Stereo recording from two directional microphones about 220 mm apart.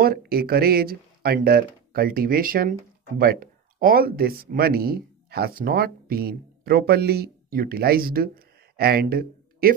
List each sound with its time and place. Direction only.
0.0 s speech: 45° right (ahead or behind)